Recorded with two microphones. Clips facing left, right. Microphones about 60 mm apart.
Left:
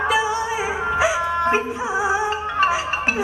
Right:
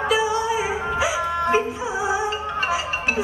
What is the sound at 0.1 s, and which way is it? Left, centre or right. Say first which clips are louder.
Music: even; left.